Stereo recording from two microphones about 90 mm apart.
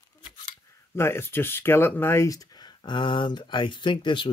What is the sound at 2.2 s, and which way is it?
Speech, 45° left (ahead or behind).